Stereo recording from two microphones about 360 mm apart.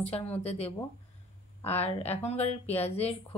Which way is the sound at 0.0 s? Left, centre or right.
Centre.